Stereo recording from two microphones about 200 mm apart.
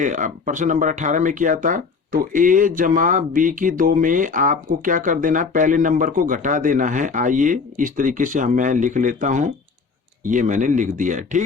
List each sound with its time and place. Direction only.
0.0 s speech: 40° right (ahead or behind)